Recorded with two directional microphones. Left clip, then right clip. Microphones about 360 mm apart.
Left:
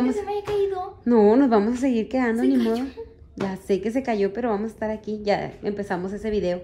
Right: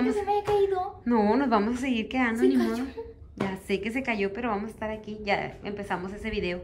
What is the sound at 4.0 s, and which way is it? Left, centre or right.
A woman's voice, centre.